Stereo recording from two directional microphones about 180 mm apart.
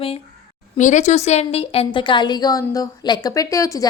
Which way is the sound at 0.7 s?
40° left (ahead or behind).